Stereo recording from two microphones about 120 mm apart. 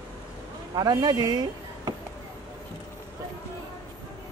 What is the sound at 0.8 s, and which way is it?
Speech, 35° right (ahead or behind).